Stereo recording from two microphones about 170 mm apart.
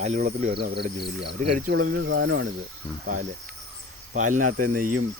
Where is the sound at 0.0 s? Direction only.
50° right (ahead or behind); by 1.4 s 75° right (ahead or behind).